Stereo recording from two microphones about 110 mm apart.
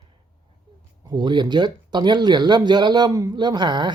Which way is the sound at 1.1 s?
45° right (ahead or behind).